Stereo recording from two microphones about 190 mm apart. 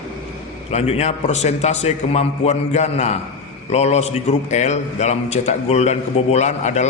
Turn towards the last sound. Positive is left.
turn(degrees=35)  # may be behind; listen again after turning